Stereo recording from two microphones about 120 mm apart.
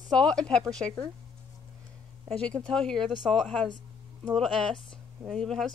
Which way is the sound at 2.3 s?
10° left (ahead or behind).